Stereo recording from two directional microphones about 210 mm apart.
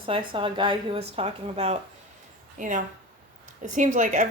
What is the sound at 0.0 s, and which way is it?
A woman's voice, 25° right (ahead or behind).